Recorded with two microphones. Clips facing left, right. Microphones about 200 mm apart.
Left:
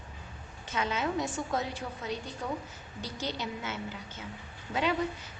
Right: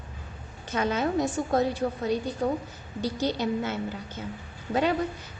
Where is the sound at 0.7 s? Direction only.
45° right (ahead or behind).